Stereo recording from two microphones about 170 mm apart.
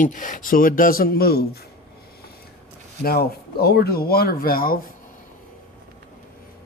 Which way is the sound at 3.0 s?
65° left (ahead or behind).